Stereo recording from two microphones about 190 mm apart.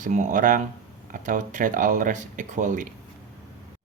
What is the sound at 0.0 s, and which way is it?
Speech, 40° right (ahead or behind).